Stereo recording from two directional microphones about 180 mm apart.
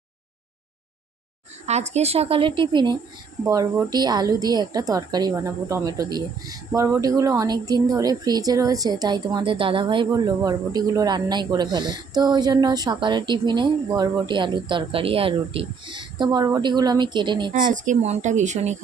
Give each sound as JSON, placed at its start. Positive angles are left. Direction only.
{"t": 1.6, "sound": "a woman's voice", "side_deg": -40}
{"t": 17.5, "sound": "a woman's voice", "side_deg": -45}